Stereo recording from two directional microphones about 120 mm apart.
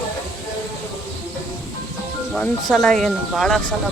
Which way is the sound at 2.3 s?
Centre (ahead or behind).